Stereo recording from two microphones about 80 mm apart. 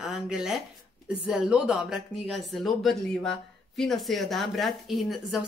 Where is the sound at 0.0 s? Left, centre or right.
Centre.